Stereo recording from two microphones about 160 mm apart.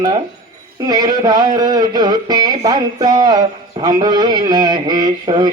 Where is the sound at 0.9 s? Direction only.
25° right (ahead or behind).